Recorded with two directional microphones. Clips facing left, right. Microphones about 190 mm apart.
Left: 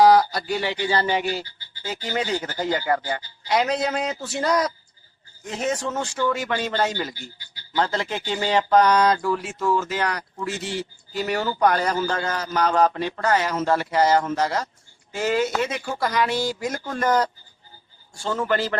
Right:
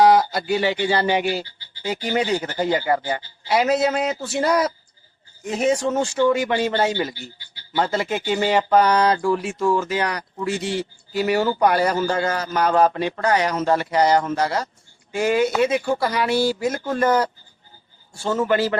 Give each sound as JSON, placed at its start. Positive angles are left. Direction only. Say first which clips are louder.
{"t": 0.1, "sound": "speech", "louder": "right 1 dB", "side_deg": -20}